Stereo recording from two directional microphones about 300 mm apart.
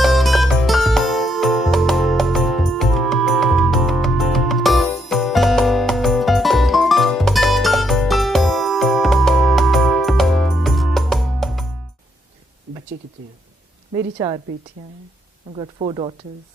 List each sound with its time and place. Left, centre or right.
0.0 s music: centre
13.9 s a sound: centre
15.5 s speech: centre